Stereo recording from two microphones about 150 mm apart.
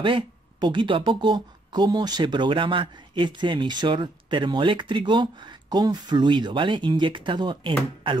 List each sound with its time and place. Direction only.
0.0 s speech: 30° right (ahead or behind)